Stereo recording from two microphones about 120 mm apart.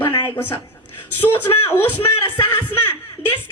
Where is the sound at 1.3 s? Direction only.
20° left (ahead or behind).